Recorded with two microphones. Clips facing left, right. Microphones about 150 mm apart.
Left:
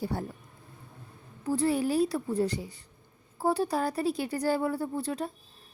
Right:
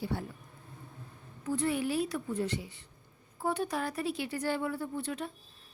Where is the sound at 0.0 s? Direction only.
40° left (ahead or behind).